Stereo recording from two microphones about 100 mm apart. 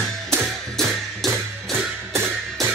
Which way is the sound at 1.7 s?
25° right (ahead or behind).